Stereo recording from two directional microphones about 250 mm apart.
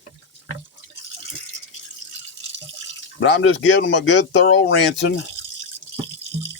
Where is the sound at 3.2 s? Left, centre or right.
Left.